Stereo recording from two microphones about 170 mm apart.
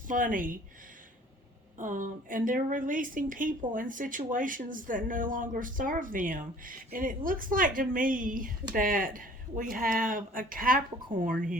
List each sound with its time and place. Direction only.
0.1 s a woman's voice: 50° right (ahead or behind)
1.8 s a woman's voice: 50° right (ahead or behind)